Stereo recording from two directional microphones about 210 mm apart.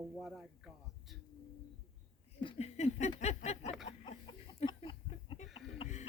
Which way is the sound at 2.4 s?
25° left (ahead or behind).